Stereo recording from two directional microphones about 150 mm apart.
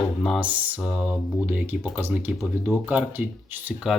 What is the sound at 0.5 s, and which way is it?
Speech, 10° right (ahead or behind).